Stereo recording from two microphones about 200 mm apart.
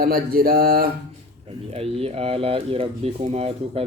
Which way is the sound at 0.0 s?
45° right (ahead or behind).